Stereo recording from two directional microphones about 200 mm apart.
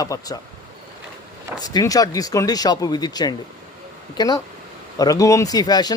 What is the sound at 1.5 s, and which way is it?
Speech, 20° left (ahead or behind).